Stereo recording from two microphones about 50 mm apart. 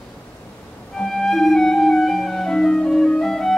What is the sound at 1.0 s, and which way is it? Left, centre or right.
Music, centre.